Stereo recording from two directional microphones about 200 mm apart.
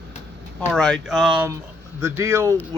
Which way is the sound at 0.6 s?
5° left (ahead or behind).